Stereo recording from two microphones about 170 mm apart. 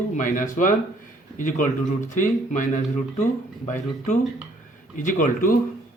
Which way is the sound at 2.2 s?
50° left (ahead or behind).